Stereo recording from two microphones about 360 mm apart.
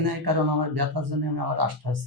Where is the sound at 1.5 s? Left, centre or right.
Right.